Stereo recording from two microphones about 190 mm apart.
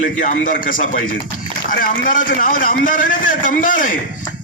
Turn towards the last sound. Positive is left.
turn(degrees=45)  # may be behind; listen again after turning